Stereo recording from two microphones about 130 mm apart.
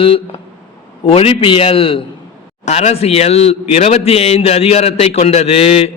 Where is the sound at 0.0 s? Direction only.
45° left (ahead or behind).